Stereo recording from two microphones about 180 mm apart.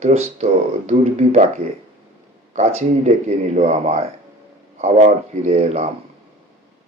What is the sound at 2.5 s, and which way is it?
Speech, 40° right (ahead or behind).